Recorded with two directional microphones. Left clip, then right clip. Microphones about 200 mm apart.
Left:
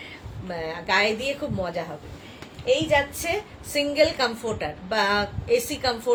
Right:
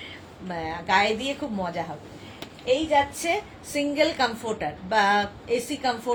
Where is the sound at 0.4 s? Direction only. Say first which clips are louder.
Even; 20° left (ahead or behind).